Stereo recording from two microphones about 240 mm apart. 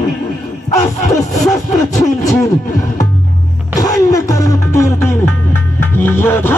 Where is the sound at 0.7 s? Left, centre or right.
Centre.